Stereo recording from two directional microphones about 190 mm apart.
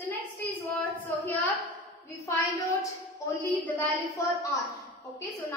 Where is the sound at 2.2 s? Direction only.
15° left (ahead or behind).